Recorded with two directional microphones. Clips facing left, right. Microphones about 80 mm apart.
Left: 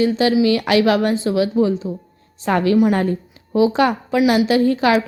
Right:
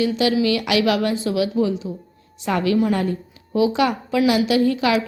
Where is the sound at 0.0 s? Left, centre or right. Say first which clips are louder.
Left 3 dB; left.